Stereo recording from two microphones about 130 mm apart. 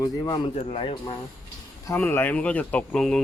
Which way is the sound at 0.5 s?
45° left (ahead or behind).